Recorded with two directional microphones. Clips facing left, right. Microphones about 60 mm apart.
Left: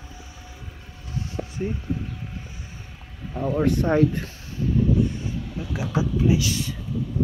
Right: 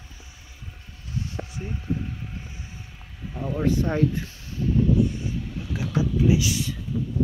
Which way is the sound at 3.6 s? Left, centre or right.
Left.